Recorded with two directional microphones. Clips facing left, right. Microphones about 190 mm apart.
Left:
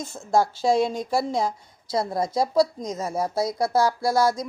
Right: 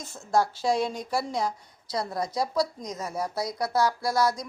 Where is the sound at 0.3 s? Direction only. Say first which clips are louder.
Left 4 dB; 25° left (ahead or behind).